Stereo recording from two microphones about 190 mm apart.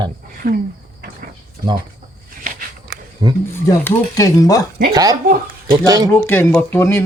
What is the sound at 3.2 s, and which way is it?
Speech, 20° right (ahead or behind).